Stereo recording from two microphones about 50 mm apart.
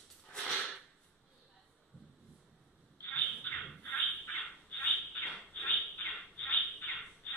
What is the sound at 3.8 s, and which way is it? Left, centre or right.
Squawk, left.